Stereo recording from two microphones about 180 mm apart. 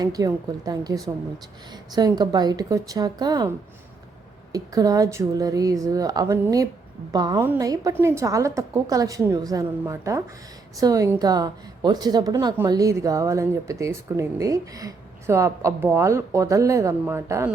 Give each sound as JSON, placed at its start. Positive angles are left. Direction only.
{"t": 0.0, "sound": "a woman's voice", "side_deg": -20}
{"t": 4.5, "sound": "a woman's voice", "side_deg": -20}